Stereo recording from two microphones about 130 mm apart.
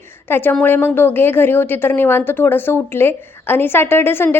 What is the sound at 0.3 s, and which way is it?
A woman's voice, 15° left (ahead or behind).